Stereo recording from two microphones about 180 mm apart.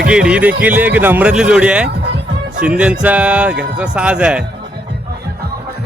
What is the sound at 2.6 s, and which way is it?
Speech, 5° right (ahead or behind).